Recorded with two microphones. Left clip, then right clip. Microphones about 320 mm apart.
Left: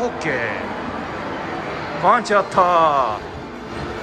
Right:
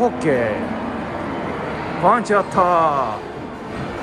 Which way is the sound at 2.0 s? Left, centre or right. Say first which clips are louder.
Even; centre.